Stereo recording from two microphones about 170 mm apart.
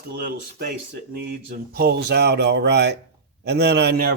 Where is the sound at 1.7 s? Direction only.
70° right (ahead or behind).